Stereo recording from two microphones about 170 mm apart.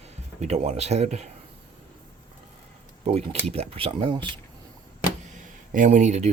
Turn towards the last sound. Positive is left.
turn(degrees=-45)  # may be behind; listen again after turning